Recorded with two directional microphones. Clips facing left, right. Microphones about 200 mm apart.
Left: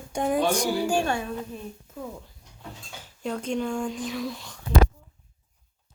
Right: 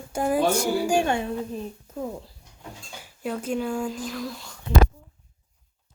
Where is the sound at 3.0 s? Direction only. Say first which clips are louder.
Right 1 dB; 5° right (ahead or behind).